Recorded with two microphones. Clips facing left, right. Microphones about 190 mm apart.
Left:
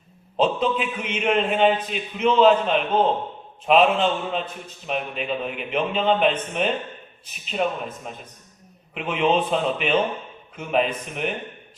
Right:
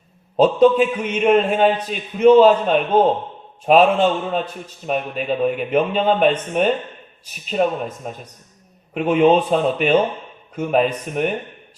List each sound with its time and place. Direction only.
0.3 s a man's voice: 40° right (ahead or behind)